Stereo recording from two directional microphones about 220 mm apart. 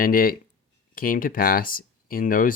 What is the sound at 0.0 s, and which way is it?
Speech, 40° left (ahead or behind).